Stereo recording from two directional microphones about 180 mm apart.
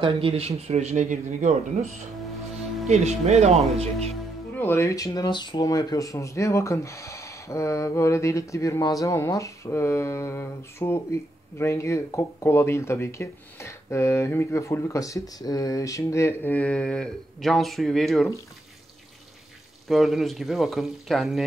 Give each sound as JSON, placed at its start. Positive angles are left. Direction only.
{"t": 0.0, "sound": "speech", "side_deg": -30}
{"t": 4.6, "sound": "speech", "side_deg": 15}
{"t": 19.9, "sound": "speech", "side_deg": 0}